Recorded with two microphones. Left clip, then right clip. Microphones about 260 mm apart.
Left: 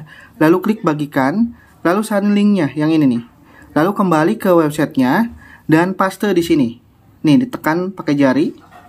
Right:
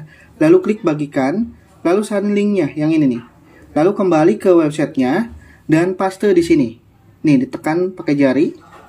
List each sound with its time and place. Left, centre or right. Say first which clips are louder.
0.4 s speech: right 2 dB; centre